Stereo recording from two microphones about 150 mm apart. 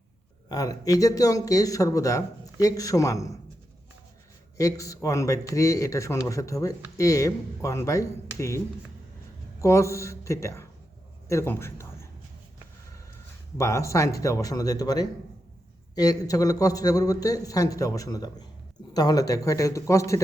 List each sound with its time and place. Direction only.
0.4 s speech: 25° left (ahead or behind)
4.5 s a man's voice: 20° left (ahead or behind)
13.6 s speech: 20° left (ahead or behind)